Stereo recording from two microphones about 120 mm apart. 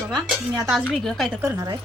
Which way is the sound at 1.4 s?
30° right (ahead or behind).